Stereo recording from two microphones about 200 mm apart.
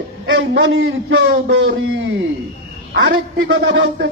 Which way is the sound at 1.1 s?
60° right (ahead or behind).